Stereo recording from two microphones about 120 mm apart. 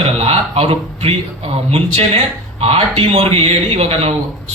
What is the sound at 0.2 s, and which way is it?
Speech, 60° right (ahead or behind).